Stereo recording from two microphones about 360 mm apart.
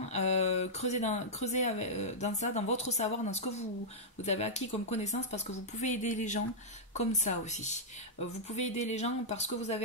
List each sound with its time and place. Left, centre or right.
0.1 s speech: centre